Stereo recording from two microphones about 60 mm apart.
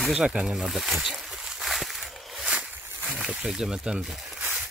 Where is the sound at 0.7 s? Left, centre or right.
Centre.